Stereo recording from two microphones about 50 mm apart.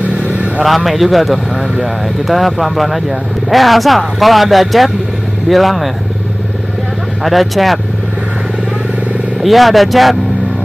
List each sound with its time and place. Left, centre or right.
0.0 s vehicle: right
0.7 s speech: centre
7.2 s speech: centre
9.4 s speech: centre